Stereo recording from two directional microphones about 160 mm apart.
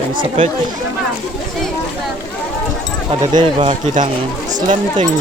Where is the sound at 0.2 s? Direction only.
35° right (ahead or behind).